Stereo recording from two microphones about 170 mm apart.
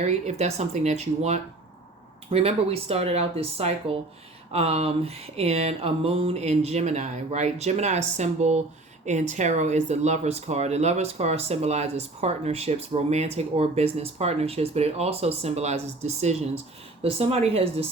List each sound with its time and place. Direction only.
0.3 s speech: 40° right (ahead or behind)